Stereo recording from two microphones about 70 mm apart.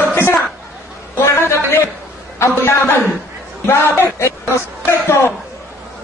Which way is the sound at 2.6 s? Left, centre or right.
Left.